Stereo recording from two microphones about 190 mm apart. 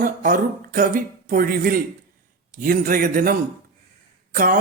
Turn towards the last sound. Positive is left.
turn(degrees=-45)  # may be behind; listen again after turning